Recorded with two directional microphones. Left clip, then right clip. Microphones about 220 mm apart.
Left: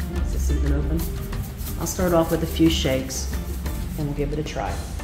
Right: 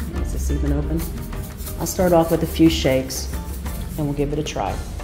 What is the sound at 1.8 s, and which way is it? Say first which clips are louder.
A woman's voice: right 4 dB; 25° right (ahead or behind).